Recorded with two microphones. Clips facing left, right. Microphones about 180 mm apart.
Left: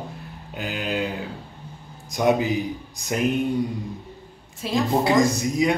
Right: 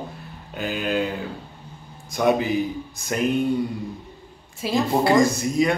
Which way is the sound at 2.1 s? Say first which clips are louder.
Even; 15° left (ahead or behind).